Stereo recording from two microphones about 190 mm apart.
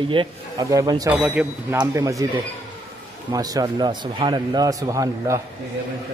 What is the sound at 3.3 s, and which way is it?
A man's voice, 20° right (ahead or behind).